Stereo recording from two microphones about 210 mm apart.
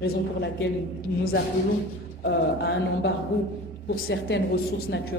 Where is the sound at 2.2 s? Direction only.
55° left (ahead or behind).